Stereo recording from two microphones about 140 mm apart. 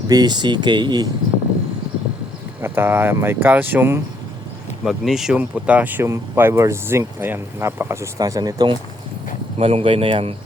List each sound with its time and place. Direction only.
0.1 s speech: 30° right (ahead or behind)
2.6 s speech: 15° right (ahead or behind)
4.8 s speech: centre (ahead or behind); by 8.8 s 30° right (ahead or behind)
9.6 s speech: 40° right (ahead or behind)